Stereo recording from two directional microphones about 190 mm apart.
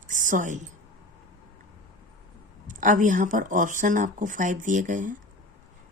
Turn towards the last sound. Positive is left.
turn(degrees=-45)  # may be behind; listen again after turning